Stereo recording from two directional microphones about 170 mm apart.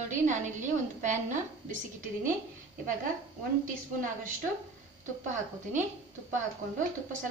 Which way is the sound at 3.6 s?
50° right (ahead or behind).